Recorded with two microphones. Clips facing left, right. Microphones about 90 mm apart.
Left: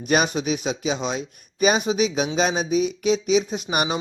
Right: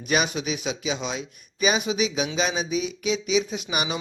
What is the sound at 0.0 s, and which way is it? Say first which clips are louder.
Speech: left 4 dB; 45° left (ahead or behind).